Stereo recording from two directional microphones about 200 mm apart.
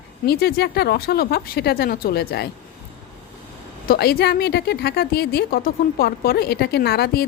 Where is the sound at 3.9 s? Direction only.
50° left (ahead or behind).